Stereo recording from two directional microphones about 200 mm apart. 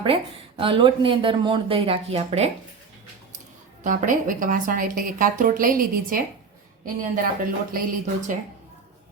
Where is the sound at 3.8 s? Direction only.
40° right (ahead or behind).